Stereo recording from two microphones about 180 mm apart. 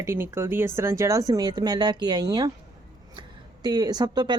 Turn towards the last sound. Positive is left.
turn(degrees=-25)  # may be behind; listen again after turning